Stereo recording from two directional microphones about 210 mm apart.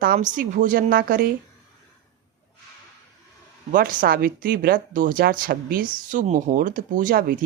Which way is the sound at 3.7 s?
40° right (ahead or behind).